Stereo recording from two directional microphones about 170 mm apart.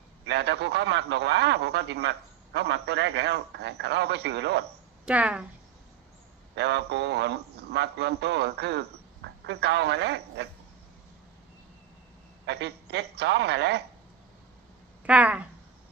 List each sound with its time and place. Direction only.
0.3 s a man's voice: 80° right
5.0 s a woman's voice: 5° right (ahead or behind)
6.6 s a man's voice: 80° right
12.5 s a man's voice: 85° right
15.0 s a woman's voice: 10° right (ahead or behind)